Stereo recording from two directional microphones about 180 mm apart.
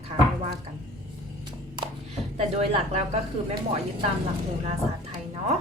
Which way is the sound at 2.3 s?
35° right (ahead or behind).